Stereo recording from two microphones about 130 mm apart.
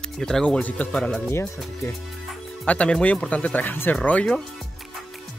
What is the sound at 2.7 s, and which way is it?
Speech, 10° left (ahead or behind).